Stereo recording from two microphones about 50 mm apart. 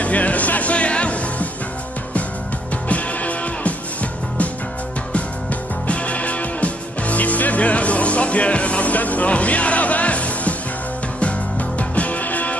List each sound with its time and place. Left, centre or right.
0.0 s music: left
2.7 s music: left